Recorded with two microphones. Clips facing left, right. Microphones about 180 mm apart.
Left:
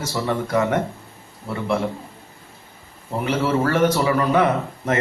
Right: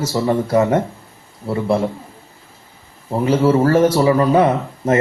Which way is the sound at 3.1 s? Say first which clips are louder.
Right 7 dB; 30° right (ahead or behind).